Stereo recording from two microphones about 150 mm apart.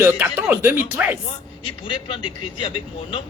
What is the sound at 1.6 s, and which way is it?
A man's voice, 30° left (ahead or behind).